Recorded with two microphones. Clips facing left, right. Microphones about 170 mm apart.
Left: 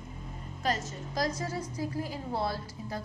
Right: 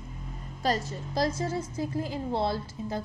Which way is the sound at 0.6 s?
35° right (ahead or behind).